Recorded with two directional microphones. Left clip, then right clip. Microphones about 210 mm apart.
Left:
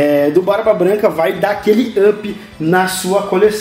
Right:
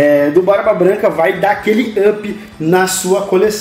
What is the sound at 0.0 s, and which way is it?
Speech, 10° left (ahead or behind).